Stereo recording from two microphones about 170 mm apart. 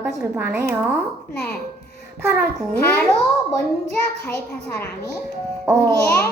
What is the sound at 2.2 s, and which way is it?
Speech, 5° right (ahead or behind).